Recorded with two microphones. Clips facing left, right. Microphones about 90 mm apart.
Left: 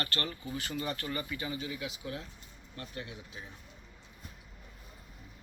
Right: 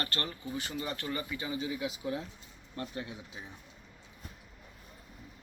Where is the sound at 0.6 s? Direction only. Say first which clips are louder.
Left 1 dB; 10° right (ahead or behind).